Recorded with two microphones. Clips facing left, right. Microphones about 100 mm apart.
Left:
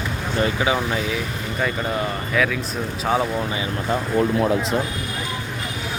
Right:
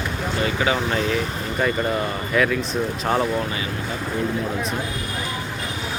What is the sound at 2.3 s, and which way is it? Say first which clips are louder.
Speech: right 2 dB; centre (ahead or behind).